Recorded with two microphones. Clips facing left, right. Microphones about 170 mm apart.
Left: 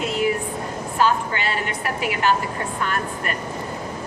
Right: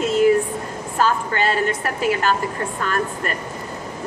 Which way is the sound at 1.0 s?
40° right (ahead or behind).